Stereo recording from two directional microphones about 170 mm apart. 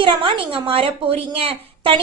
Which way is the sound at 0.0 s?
30° right (ahead or behind).